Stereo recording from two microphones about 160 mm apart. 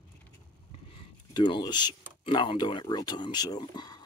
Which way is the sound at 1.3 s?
30° left (ahead or behind).